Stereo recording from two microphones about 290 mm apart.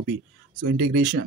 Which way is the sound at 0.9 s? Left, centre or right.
Right.